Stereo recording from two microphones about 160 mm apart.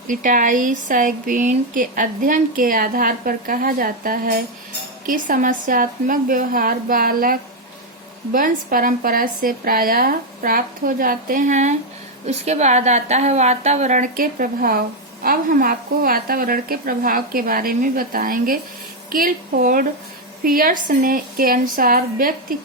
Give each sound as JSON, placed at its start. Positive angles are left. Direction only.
{"t": 0.1, "sound": "a woman's voice", "side_deg": -55}